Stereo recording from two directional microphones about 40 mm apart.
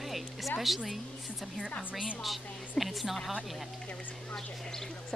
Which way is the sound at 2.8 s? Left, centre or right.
Centre.